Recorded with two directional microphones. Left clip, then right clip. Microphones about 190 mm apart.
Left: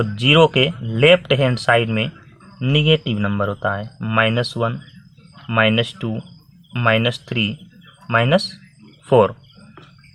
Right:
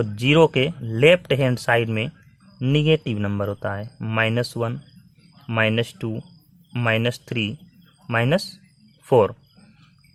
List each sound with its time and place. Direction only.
0.0 s speech: 40° right (ahead or behind)